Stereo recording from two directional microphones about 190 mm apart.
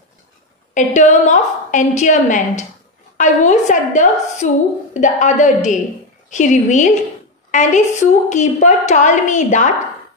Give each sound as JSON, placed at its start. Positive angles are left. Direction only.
{"t": 0.7, "sound": "a woman's voice", "side_deg": 40}